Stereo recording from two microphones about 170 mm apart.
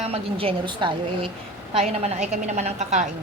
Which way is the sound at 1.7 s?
40° right (ahead or behind).